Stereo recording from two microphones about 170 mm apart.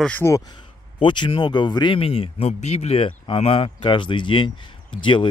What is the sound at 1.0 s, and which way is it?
Speech, 30° left (ahead or behind).